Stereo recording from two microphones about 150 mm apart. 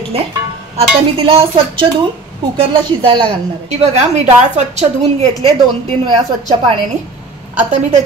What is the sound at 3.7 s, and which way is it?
Speech, 50° right (ahead or behind).